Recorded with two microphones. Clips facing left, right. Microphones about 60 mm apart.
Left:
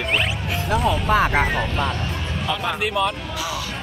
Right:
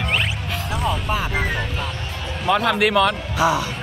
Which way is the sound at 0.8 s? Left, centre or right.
Left.